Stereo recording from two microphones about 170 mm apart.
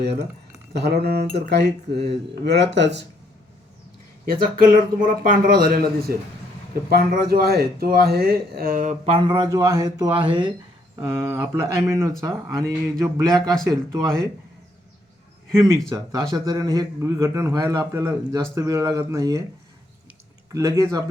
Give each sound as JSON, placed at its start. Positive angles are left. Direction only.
{"t": 0.7, "sound": "speech", "side_deg": -75}
{"t": 4.3, "sound": "speech", "side_deg": -55}
{"t": 9.1, "sound": "a man's voice", "side_deg": -25}
{"t": 13.4, "sound": "speech", "side_deg": 5}
{"t": 13.7, "sound": "a man's voice", "side_deg": -20}
{"t": 15.5, "sound": "a man's voice", "side_deg": -15}
{"t": 20.5, "sound": "a man's voice", "side_deg": -20}